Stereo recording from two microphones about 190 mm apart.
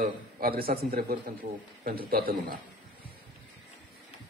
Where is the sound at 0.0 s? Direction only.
50° right (ahead or behind).